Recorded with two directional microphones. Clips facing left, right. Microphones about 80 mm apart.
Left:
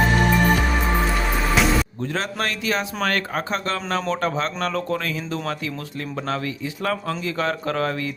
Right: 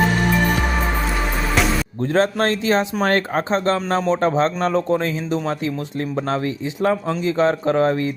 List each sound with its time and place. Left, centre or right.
2.1 s speech: right
6.8 s speech: right